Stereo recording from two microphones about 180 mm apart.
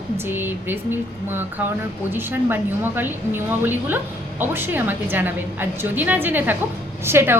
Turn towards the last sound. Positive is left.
turn(degrees=-15)  # may be behind; listen again after turning